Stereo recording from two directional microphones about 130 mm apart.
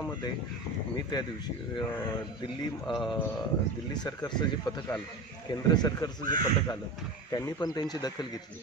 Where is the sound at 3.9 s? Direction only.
30° left (ahead or behind).